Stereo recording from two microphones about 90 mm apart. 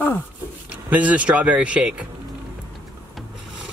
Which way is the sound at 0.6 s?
15° right (ahead or behind).